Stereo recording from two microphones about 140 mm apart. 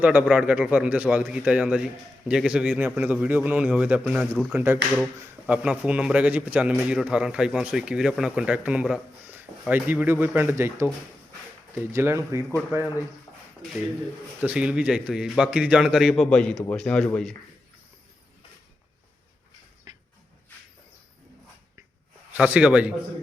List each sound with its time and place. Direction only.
0.0 s a man's voice: 10° right (ahead or behind)
14.4 s a man's voice: 10° right (ahead or behind); by 17.3 s 5° left (ahead or behind)
19.9 s a sound: 30° right (ahead or behind)
22.3 s a man's voice: 10° right (ahead or behind)